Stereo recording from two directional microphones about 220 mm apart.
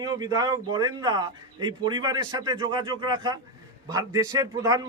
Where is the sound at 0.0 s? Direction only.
15° right (ahead or behind).